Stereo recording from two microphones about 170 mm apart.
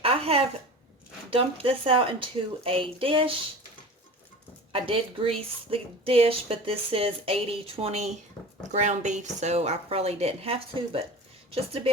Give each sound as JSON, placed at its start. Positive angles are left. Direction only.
{"t": 0.0, "sound": "a sound", "side_deg": -35}
{"t": 1.3, "sound": "speech", "side_deg": -30}
{"t": 4.7, "sound": "speech", "side_deg": -30}